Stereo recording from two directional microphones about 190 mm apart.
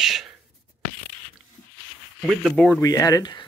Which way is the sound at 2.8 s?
20° left (ahead or behind).